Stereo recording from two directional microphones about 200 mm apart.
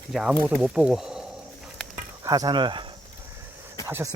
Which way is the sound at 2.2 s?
20° right (ahead or behind).